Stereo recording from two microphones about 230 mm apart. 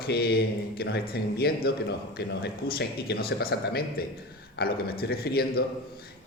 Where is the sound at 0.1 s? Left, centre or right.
Left.